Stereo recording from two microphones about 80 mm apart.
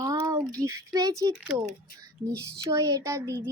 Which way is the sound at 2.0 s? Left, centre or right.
Right.